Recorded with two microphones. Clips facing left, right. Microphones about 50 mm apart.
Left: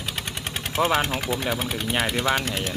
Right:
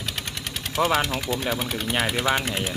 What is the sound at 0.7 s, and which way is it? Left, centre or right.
Speech, left.